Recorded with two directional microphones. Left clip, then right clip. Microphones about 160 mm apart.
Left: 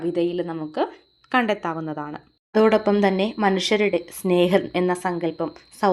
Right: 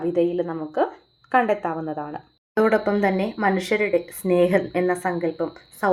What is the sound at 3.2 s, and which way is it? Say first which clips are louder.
Speech: left 1 dB; 35° left (ahead or behind).